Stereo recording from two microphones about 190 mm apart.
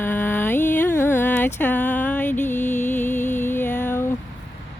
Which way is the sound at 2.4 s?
40° left (ahead or behind).